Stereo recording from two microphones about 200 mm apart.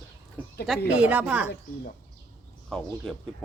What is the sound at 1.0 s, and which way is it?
Speech, 5° right (ahead or behind).